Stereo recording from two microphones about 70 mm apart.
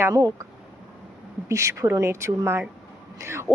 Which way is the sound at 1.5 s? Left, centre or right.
Right.